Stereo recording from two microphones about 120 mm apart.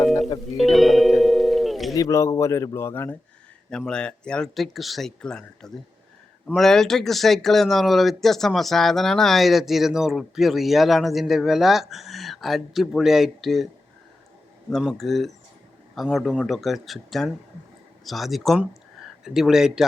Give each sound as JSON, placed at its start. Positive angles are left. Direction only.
{"t": 0.0, "sound": "music", "side_deg": 0}
{"t": 2.0, "sound": "a man's voice", "side_deg": 25}
{"t": 3.7, "sound": "speech", "side_deg": 5}
{"t": 14.7, "sound": "speech", "side_deg": 0}